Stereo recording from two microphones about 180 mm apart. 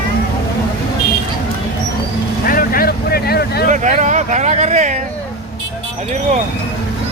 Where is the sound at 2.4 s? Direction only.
55° left (ahead or behind).